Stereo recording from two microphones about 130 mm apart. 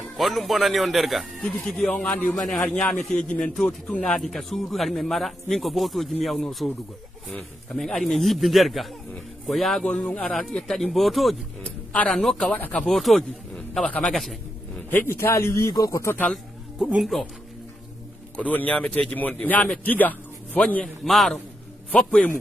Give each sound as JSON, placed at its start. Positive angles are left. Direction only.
{"t": 0.2, "sound": "speech", "side_deg": 0}
{"t": 11.6, "sound": "speech", "side_deg": 10}
{"t": 12.5, "sound": "a man's voice", "side_deg": 15}
{"t": 12.8, "sound": "speech", "side_deg": 0}
{"t": 14.9, "sound": "a man's voice", "side_deg": 15}
{"t": 16.7, "sound": "speech", "side_deg": -10}
{"t": 18.3, "sound": "a man's voice", "side_deg": 10}